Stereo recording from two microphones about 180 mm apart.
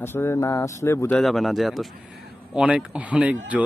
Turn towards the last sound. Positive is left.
turn(degrees=-10)  # may be behind; listen again after turning